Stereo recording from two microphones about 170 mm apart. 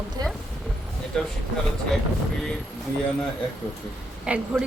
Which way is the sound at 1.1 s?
5° left (ahead or behind).